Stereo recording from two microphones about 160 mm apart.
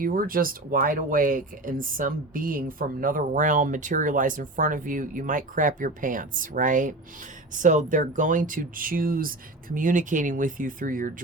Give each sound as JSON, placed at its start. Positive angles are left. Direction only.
{"t": 0.0, "sound": "speech", "side_deg": -65}